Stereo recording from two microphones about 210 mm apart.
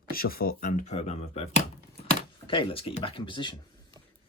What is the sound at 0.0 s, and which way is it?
Speech, 45° left (ahead or behind).